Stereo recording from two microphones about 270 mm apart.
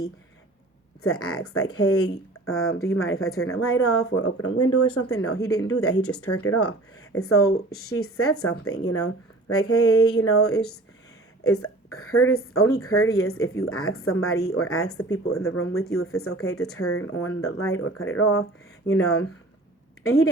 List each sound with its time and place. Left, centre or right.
1.0 s a woman's voice: left
5.4 s speech: centre
5.6 s a woman's voice: left
6.0 s speech: centre
6.2 s a woman's voice: left
10.0 s speech: centre
10.2 s a woman's voice: left